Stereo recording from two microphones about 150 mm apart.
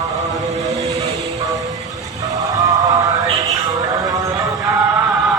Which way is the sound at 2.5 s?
25° right (ahead or behind).